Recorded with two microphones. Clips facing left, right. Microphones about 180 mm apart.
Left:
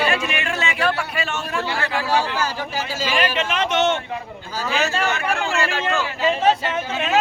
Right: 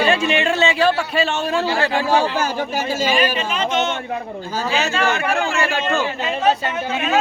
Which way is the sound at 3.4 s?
80° left.